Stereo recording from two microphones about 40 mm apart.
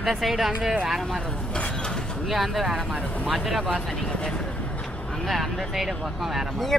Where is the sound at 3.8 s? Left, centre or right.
Left.